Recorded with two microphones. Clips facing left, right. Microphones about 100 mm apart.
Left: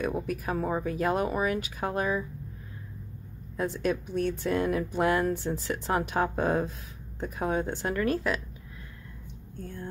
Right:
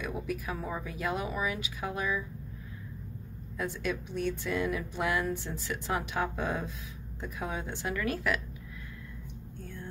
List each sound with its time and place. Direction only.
0.0 s speech: 45° left (ahead or behind)
3.5 s speech: 35° left (ahead or behind)